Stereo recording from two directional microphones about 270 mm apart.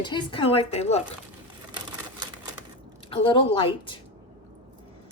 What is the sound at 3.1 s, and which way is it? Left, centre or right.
Speech, centre.